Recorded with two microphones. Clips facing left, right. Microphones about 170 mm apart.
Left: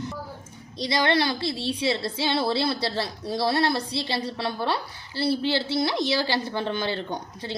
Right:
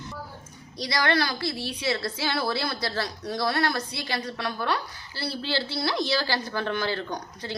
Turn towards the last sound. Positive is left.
turn(degrees=25)  # may be behind; listen again after turning